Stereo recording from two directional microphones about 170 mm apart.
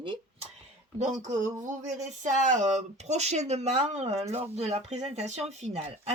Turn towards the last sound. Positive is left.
turn(degrees=-40)  # may be behind; listen again after turning